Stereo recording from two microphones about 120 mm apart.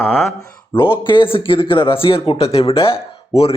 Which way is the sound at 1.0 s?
45° left (ahead or behind).